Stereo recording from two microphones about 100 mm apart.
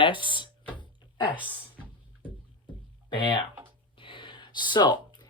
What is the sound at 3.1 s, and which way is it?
Speech, 55° left (ahead or behind).